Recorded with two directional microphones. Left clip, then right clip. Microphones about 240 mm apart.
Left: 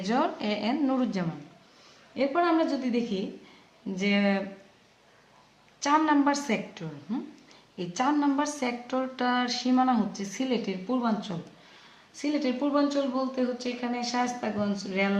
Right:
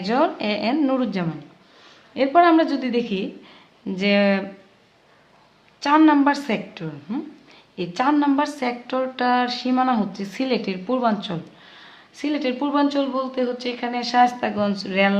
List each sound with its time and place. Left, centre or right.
0.0 s a woman's voice: right
2.1 s a woman's voice: right
5.8 s a woman's voice: right